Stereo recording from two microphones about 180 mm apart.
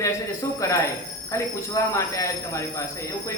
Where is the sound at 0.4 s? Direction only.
20° left (ahead or behind).